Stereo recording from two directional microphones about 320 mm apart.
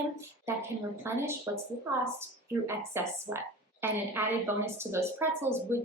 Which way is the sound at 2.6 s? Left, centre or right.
Centre.